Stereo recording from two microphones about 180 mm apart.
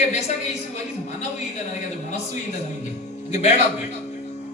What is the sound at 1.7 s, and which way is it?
Speech, 40° left (ahead or behind).